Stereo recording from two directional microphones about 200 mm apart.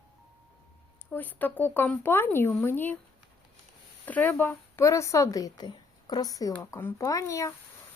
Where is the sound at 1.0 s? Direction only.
10° left (ahead or behind).